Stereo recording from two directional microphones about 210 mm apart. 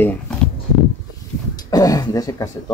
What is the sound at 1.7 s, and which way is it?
Speech, 15° left (ahead or behind).